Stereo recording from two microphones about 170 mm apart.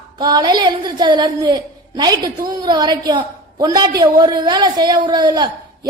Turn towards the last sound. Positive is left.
turn(degrees=-25)  # may be behind; listen again after turning